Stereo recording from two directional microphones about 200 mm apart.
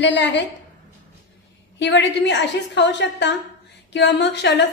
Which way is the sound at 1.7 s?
60° left (ahead or behind).